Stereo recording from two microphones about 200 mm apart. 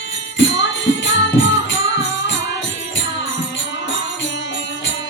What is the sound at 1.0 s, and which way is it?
Music, 65° left (ahead or behind).